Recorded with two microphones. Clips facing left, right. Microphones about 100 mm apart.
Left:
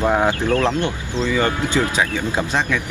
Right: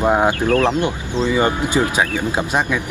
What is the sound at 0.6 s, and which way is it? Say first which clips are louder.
Speech: right 2 dB; 15° right (ahead or behind).